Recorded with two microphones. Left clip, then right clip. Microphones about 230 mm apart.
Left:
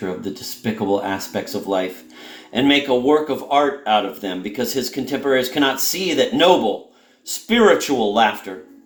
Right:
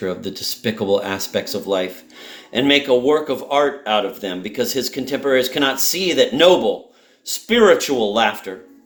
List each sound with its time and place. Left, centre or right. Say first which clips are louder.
0.0 s speech: right 3 dB; right